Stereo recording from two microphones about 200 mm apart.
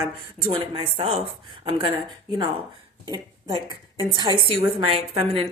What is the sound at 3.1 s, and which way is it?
A woman's voice, 20° right (ahead or behind).